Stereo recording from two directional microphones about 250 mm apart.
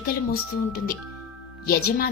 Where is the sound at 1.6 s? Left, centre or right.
Left.